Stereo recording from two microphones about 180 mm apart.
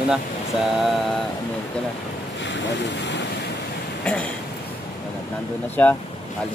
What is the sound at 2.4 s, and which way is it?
Speech, 80° left.